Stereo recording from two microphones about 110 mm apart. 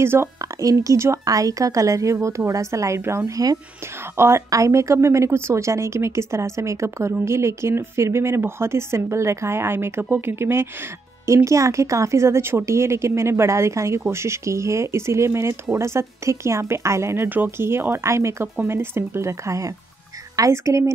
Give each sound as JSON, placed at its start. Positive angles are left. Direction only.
{"t": 0.0, "sound": "speech", "side_deg": -25}